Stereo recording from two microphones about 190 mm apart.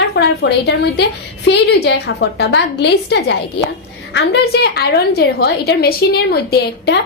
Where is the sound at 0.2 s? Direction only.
60° left (ahead or behind).